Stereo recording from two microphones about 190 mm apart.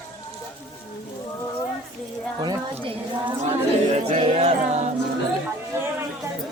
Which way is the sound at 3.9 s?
30° right (ahead or behind).